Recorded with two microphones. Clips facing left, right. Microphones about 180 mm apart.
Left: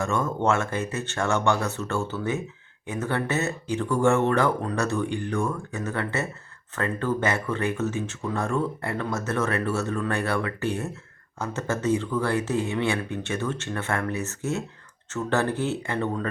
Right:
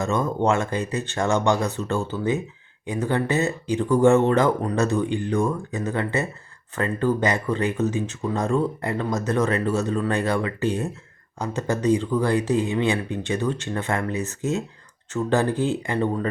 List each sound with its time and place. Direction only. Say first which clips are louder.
0.0 s speech: right 2 dB; 15° right (ahead or behind)